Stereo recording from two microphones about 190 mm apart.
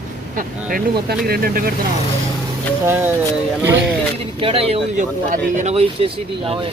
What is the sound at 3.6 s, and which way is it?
Speech, 10° right (ahead or behind).